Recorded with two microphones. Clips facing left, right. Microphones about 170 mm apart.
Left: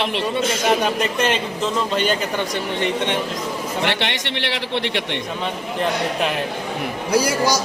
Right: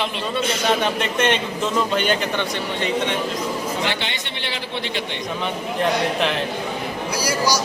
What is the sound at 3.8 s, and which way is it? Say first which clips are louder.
A man's voice: left 3 dB; 70° left (ahead or behind).